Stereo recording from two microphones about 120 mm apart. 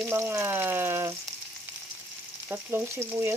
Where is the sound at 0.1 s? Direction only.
20° right (ahead or behind).